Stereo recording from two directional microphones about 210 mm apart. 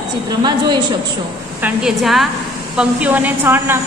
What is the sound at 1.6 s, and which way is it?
A woman's voice, 5° right (ahead or behind).